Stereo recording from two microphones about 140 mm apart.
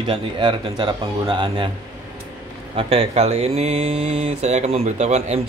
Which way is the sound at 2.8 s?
45° right (ahead or behind).